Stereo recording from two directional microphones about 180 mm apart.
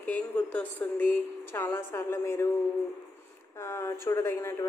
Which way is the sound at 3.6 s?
15° left (ahead or behind).